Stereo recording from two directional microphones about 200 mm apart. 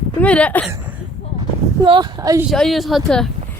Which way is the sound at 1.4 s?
25° right (ahead or behind).